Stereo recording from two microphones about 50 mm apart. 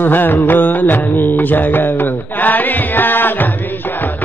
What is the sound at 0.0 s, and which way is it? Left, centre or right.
Music, left.